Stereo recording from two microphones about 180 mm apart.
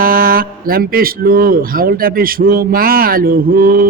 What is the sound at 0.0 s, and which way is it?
A man's voice, 55° right (ahead or behind).